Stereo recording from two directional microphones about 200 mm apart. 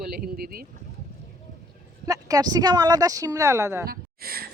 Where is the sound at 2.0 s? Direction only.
15° right (ahead or behind).